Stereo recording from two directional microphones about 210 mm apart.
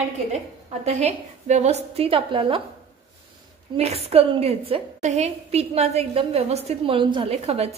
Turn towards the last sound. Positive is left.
turn(degrees=-30)  # may be behind; listen again after turning